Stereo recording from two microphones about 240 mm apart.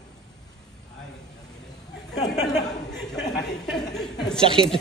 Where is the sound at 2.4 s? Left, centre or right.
Centre.